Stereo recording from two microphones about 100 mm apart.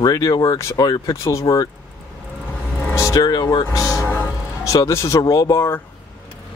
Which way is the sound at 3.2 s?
45° left (ahead or behind).